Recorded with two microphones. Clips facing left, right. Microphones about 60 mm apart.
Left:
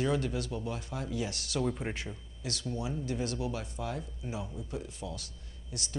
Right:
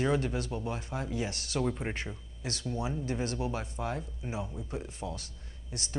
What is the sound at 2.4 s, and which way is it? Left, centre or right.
Speech, right.